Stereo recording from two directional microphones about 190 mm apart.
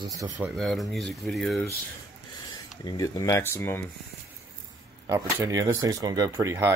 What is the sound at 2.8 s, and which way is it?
Speech, 20° left (ahead or behind).